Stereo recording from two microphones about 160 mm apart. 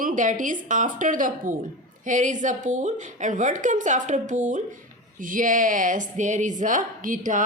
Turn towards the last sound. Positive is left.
turn(degrees=-55)  # may be behind; listen again after turning